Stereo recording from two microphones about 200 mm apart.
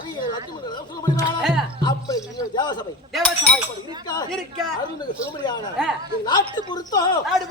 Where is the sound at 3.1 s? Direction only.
5° left (ahead or behind).